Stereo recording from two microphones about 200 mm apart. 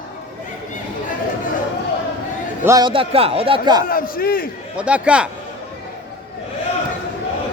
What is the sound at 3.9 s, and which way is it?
Speech, 45° left (ahead or behind).